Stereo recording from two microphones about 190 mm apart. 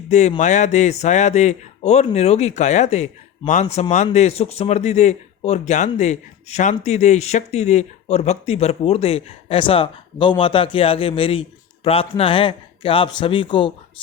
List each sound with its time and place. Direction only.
0.1 s speech: 40° left (ahead or behind)